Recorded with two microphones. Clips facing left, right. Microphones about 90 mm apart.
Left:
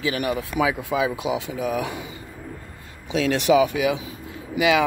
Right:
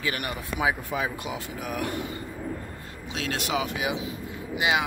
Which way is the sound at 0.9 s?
90° left.